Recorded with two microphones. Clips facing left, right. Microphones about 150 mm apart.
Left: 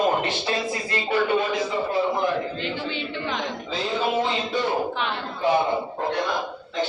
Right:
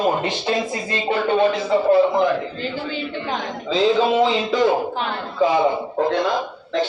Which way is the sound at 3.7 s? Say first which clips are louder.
Right 9 dB; 90° right.